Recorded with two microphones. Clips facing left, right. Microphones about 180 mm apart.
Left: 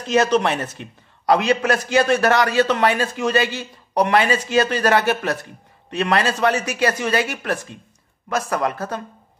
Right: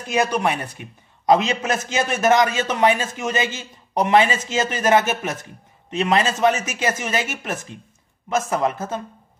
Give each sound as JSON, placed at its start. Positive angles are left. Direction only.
{"t": 0.0, "sound": "a man's voice", "side_deg": -10}